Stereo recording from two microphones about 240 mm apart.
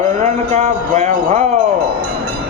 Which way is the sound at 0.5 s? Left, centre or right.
Right.